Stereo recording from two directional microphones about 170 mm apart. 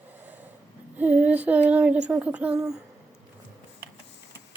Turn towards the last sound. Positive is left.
turn(degrees=-5)  # may be behind; listen again after turning